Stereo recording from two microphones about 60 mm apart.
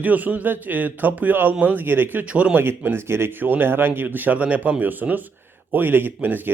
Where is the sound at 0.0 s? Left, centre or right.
Right.